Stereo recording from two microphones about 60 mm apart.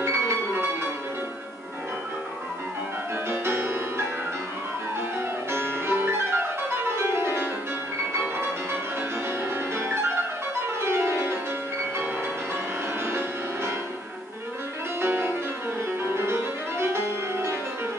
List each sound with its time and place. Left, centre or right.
0.0 s music: right
3.3 s music: right
5.5 s music: right
10.8 s music: right
15.0 s music: right